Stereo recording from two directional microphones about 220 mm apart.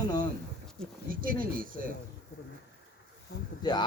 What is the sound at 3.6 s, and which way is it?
Speech, 20° left (ahead or behind).